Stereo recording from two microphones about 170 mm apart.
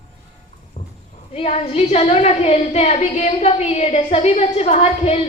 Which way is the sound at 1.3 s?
35° left (ahead or behind).